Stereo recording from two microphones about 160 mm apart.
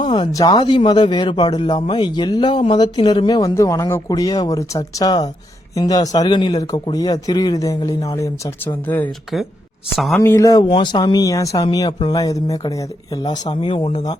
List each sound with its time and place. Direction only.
0.0 s a man's voice: 30° left (ahead or behind); by 9.0 s 10° left (ahead or behind)
9.9 s speech: centre (ahead or behind)
10.2 s a man's voice: 20° left (ahead or behind)